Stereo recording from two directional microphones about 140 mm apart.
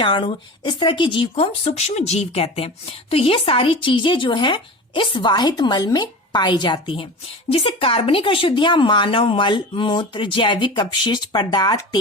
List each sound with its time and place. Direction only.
0.0 s speech: 35° left (ahead or behind)